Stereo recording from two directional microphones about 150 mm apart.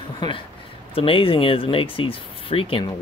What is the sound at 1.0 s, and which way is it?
Speech, 40° left (ahead or behind).